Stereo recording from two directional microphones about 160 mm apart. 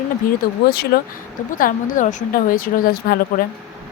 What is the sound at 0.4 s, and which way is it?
Speech, 65° left (ahead or behind).